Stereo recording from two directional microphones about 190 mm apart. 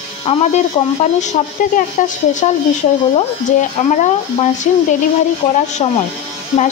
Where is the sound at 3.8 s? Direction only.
40° left (ahead or behind).